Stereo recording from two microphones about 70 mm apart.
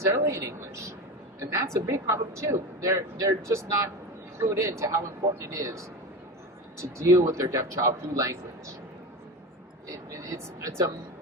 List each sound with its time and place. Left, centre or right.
0.0 s speech: right
7.0 s speech: right
9.9 s speech: right